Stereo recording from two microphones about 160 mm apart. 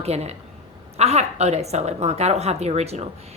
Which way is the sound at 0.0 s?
40° right (ahead or behind).